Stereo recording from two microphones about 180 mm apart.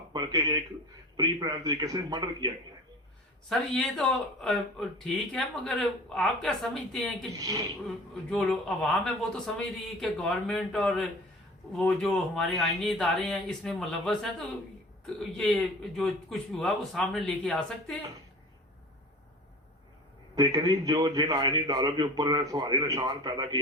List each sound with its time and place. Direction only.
0.1 s a man's voice: 20° right (ahead or behind)
3.5 s speech: 5° left (ahead or behind)
7.3 s a man's voice: 20° right (ahead or behind)
8.3 s speech: centre (ahead or behind)
20.3 s a man's voice: 20° right (ahead or behind)